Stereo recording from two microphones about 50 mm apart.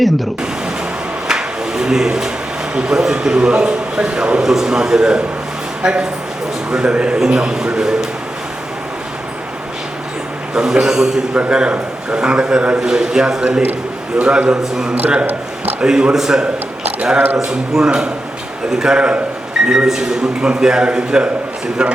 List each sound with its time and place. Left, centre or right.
1.3 s a sound: centre
2.7 s a man's voice: centre
10.5 s a man's voice: centre